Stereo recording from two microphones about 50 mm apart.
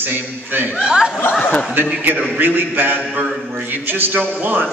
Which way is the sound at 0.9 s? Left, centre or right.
Centre.